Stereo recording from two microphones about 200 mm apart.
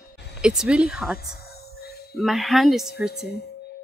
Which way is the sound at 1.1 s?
50° left (ahead or behind).